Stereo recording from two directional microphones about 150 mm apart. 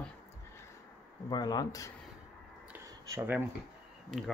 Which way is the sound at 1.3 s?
25° left (ahead or behind).